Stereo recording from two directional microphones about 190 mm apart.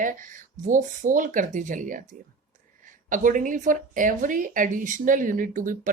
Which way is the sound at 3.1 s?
45° right (ahead or behind).